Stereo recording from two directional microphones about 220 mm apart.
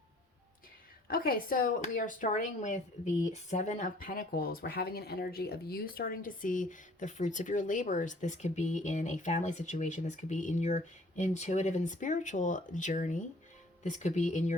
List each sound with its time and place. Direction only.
1.1 s speech: 40° left (ahead or behind)